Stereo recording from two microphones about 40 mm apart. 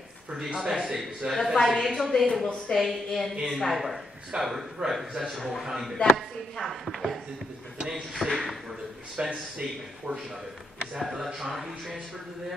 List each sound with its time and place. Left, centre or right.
0.3 s a man's voice: centre
1.3 s a woman's voice: centre
5.4 s a woman's voice: centre
5.7 s a man's voice: centre
9.3 s a man's voice: right; by 12.0 s centre